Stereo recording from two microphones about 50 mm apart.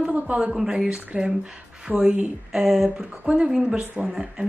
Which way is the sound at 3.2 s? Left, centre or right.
Right.